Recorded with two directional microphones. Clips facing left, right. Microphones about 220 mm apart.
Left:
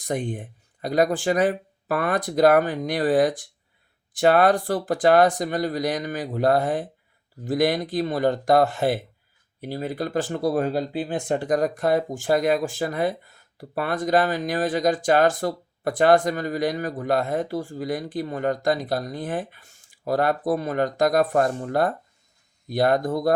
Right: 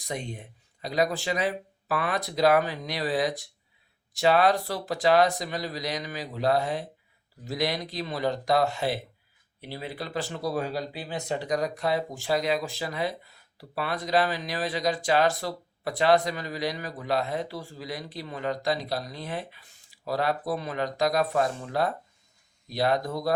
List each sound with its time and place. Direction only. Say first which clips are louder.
0.0 s speech: left 8 dB; 50° left (ahead or behind)